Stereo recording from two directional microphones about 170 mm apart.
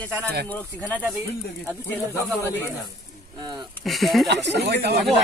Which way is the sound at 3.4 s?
25° right (ahead or behind).